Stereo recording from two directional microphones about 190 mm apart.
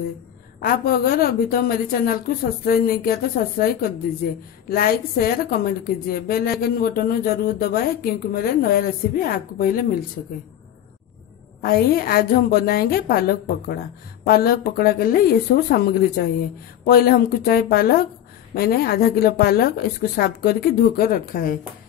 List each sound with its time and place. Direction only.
0.6 s a woman's voice: 50° left (ahead or behind)
11.6 s a woman's voice: 50° left (ahead or behind)